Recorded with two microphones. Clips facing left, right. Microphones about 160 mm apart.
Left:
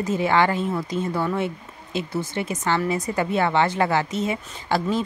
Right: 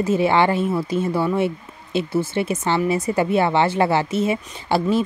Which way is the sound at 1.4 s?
15° left (ahead or behind).